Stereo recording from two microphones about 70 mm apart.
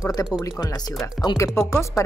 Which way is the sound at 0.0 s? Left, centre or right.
Left.